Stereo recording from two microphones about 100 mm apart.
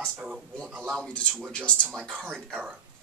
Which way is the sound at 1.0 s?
10° left (ahead or behind).